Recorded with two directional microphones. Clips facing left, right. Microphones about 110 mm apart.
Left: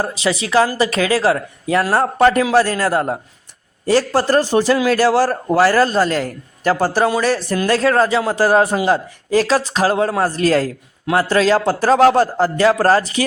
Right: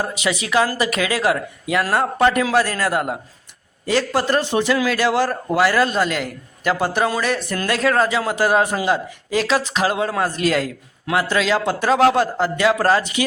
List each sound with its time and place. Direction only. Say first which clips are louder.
0.0 s a man's voice: left 3 dB; 30° left (ahead or behind)